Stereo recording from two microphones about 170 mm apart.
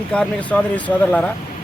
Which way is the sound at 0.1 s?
5° left (ahead or behind).